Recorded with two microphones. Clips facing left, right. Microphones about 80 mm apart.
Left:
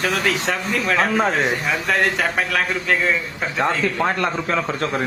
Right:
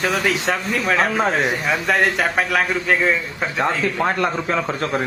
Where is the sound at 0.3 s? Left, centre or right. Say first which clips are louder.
Right 1 dB; centre.